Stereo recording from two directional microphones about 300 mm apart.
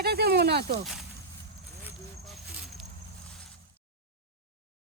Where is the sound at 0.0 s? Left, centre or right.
Right.